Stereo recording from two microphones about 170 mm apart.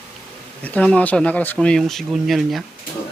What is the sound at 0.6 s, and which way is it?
Speech, 10° left (ahead or behind).